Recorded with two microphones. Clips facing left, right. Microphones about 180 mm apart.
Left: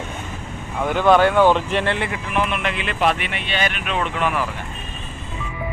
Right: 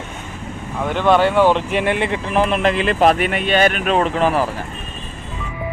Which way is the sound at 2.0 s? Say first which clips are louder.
Right 5 dB; 30° right (ahead or behind).